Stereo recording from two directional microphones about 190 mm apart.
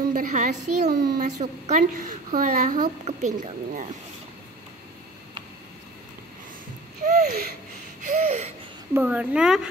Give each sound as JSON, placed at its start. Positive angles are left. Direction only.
{"t": 0.1, "sound": "a woman's voice", "side_deg": -45}
{"t": 7.1, "sound": "a sound", "side_deg": -40}
{"t": 8.9, "sound": "speech", "side_deg": -5}